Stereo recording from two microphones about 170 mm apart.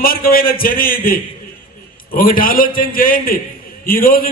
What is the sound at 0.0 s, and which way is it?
A man's voice, 60° left (ahead or behind).